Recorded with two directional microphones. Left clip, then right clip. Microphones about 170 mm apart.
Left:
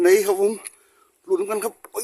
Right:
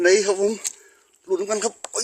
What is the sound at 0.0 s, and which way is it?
Speech, 10° left (ahead or behind).